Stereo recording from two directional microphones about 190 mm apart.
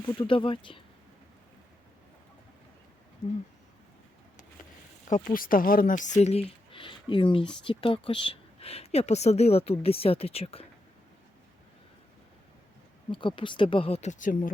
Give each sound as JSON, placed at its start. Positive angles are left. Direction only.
{"t": 0.1, "sound": "speech", "side_deg": 25}
{"t": 5.0, "sound": "speech", "side_deg": 45}
{"t": 13.1, "sound": "speech", "side_deg": 25}